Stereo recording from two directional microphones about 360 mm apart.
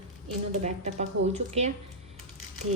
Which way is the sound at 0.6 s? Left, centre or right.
Centre.